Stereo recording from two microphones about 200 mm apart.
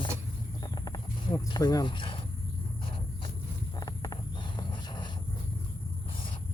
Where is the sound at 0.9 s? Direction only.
20° left (ahead or behind).